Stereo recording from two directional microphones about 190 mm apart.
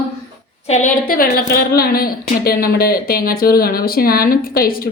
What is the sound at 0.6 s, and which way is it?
A woman's voice, 40° left (ahead or behind).